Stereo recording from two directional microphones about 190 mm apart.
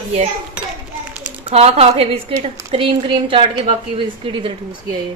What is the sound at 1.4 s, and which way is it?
A woman's voice, 30° right (ahead or behind).